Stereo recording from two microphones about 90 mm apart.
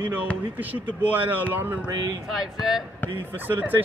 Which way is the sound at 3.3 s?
20° right (ahead or behind).